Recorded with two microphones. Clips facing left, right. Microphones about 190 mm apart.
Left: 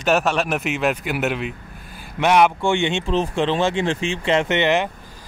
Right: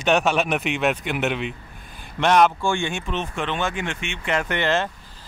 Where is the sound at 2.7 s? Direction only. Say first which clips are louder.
Left 5 dB; 20° left (ahead or behind).